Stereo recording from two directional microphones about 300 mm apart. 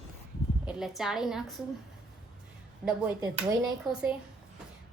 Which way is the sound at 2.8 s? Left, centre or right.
Centre.